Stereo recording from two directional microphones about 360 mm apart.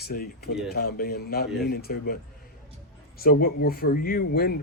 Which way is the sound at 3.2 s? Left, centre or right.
Left.